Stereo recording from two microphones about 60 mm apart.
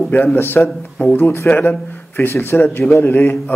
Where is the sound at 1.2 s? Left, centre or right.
Left.